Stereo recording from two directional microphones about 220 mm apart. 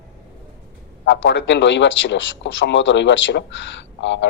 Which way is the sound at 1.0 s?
55° left (ahead or behind).